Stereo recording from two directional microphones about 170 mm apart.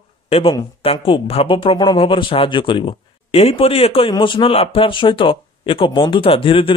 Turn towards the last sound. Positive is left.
turn(degrees=30)  # may be behind; listen again after turning